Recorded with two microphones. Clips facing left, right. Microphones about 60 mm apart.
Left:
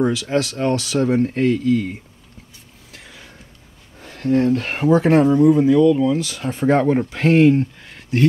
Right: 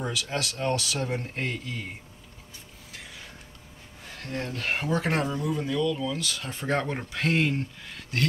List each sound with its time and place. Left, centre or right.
0.6 s speech: left
1.1 s speech: left
4.0 s speech: left
4.7 s speech: left
7.2 s speech: left
7.8 s speech: centre